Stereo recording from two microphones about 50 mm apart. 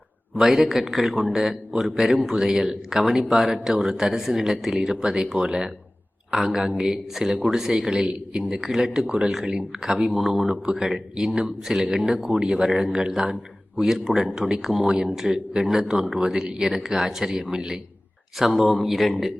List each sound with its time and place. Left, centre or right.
0.3 s speech: centre
10.5 s a man's voice: centre
10.8 s speech: centre
18.3 s speech: centre